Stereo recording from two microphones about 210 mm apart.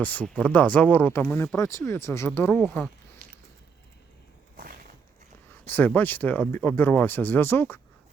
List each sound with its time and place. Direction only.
0.0 s speech: 5° left (ahead or behind)
4.5 s a sound: 45° right (ahead or behind)
5.6 s speech: 10° left (ahead or behind)